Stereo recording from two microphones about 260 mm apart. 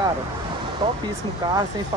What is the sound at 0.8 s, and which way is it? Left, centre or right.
Speech, centre.